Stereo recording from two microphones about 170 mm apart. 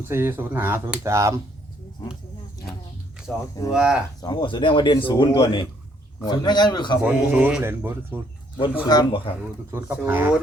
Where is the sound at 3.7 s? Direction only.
5° right (ahead or behind).